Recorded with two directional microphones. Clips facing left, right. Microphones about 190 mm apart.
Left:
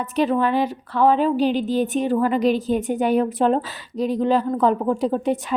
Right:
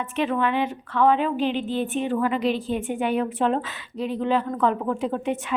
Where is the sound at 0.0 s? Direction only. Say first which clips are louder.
Left 4 dB; 35° left (ahead or behind).